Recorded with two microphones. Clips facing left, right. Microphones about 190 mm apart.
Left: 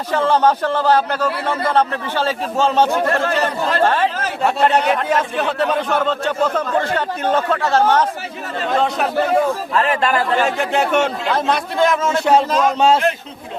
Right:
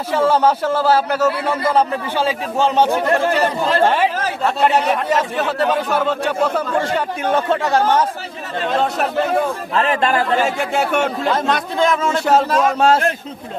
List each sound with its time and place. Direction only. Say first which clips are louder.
0.1 s a man's voice: even; 10° right (ahead or behind)
4.4 s a man's voice: left 1 dB; centre (ahead or behind)
8.8 s a man's voice: left 1 dB; centre (ahead or behind)
9.7 s speech: right 2 dB; 20° right (ahead or behind)
10.3 s a man's voice: even; 10° right (ahead or behind)